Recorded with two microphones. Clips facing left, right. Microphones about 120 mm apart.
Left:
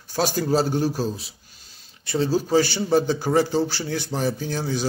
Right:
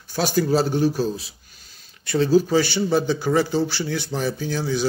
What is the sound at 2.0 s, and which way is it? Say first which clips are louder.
Speech: right 4 dB; 30° left (ahead or behind).